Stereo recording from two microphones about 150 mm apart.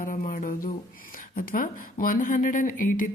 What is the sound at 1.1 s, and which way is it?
Speech, 70° left (ahead or behind).